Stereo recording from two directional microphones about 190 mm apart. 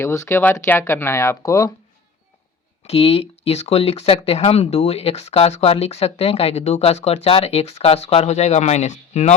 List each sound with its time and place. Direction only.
0.0 s speech: 15° left (ahead or behind)
2.8 s speech: 30° left (ahead or behind)